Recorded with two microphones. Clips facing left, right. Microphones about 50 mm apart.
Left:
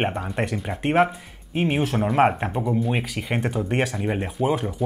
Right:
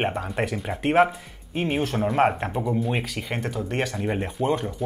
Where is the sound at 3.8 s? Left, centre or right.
Centre.